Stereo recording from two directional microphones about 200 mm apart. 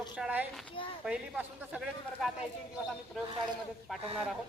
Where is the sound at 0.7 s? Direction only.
25° left (ahead or behind).